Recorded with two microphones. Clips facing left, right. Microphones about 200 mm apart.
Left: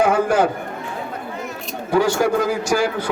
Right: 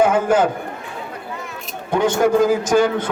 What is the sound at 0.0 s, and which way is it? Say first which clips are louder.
Speech: right 1 dB; 20° right (ahead or behind).